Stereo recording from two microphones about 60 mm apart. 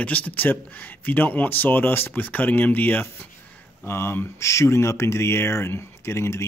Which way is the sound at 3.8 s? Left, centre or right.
Left.